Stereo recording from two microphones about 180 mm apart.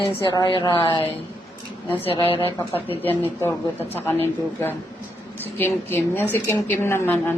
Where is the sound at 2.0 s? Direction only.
30° left (ahead or behind).